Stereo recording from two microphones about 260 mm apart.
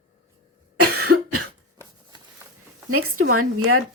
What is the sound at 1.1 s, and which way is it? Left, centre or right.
Cough, right.